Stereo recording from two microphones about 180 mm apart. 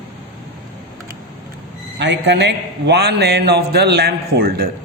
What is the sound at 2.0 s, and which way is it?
A man's voice, 75° right (ahead or behind).